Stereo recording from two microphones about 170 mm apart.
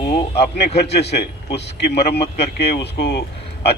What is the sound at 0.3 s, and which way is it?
Speech, 75° left (ahead or behind).